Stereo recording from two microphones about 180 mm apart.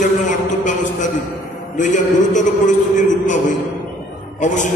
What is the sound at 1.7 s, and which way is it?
A man's voice, 45° left (ahead or behind).